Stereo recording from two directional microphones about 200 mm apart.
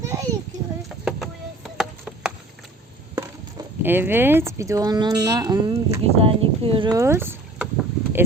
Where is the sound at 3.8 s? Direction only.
10° right (ahead or behind).